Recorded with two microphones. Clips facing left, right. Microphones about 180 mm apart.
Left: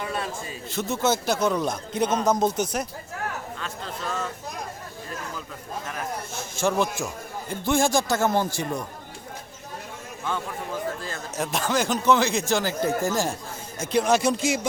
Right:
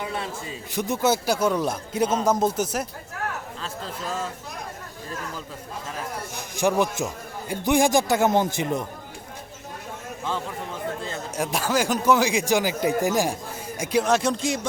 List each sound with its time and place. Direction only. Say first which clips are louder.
0.0 s a man's voice: even; 20° right (ahead or behind); by 2.8 s 5° right (ahead or behind)
6.3 s a man's voice: right 2 dB; 15° right (ahead or behind)
11.3 s a man's voice: right 1 dB; 10° right (ahead or behind)
14.0 s speech: left 2 dB; centre (ahead or behind)